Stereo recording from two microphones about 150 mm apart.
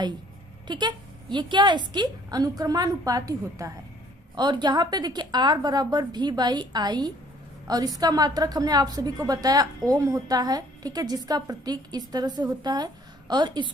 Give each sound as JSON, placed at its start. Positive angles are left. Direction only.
{"t": 0.7, "sound": "a woman's voice", "side_deg": -30}